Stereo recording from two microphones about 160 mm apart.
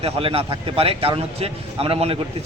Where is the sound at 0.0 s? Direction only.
35° right (ahead or behind).